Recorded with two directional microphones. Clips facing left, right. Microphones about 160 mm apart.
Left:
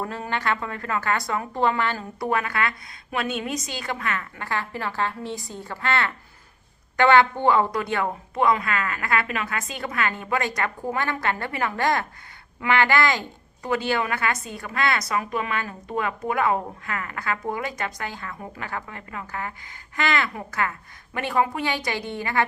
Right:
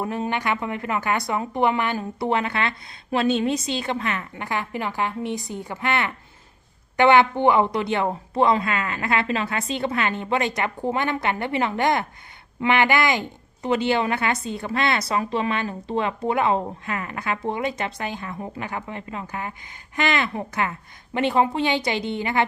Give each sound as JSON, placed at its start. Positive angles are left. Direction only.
{"t": 0.0, "sound": "a woman's voice", "side_deg": -20}